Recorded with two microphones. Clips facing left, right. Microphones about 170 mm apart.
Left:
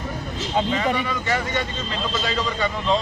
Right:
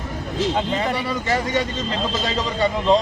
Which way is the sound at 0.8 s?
35° right (ahead or behind).